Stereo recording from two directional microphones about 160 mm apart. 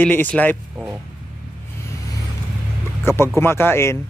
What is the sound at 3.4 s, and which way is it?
Speech, 15° left (ahead or behind).